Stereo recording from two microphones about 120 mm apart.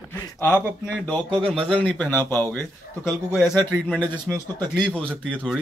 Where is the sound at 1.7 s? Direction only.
10° left (ahead or behind).